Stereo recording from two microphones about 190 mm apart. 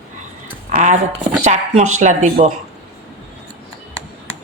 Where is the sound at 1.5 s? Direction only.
35° right (ahead or behind).